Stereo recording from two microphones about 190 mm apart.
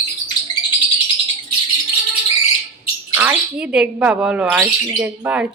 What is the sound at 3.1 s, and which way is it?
Speech, 5° right (ahead or behind).